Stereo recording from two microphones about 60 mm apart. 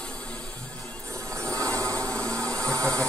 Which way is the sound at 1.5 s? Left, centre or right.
Right.